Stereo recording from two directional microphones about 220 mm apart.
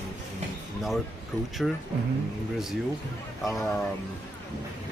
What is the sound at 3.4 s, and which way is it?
Speech, centre (ahead or behind).